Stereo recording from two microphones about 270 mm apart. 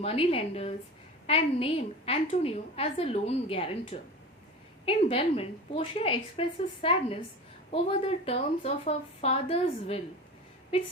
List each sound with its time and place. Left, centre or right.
0.0 s speech: left